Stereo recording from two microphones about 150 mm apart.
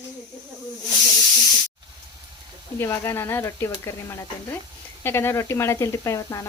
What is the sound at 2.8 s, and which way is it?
Speech, 15° left (ahead or behind).